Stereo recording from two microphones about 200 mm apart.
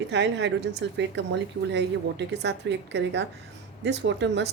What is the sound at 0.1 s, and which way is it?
A woman's voice, 60° right (ahead or behind).